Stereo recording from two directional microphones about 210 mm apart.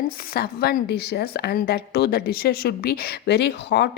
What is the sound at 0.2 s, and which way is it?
A woman's voice, 45° left (ahead or behind).